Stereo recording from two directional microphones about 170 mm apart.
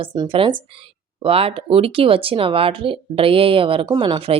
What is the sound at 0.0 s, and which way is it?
Speech, 30° right (ahead or behind).